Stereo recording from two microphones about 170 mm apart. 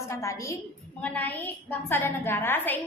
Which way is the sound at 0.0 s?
20° left (ahead or behind).